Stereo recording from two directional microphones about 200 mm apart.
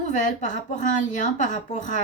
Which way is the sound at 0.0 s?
40° left (ahead or behind).